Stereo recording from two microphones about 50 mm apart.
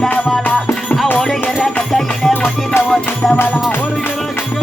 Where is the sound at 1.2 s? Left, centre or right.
Centre.